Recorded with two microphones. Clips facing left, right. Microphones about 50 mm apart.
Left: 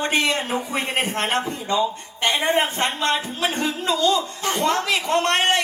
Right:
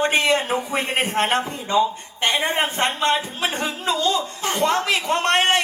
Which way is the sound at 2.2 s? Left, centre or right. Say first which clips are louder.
Left 1 dB; right.